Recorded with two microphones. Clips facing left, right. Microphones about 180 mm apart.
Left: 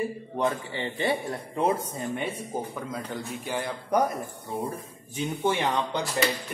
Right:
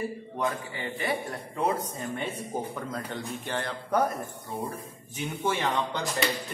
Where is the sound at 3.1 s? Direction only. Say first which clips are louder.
Left 1 dB; 10° left (ahead or behind).